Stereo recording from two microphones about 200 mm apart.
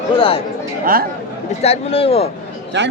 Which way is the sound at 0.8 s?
45° right (ahead or behind).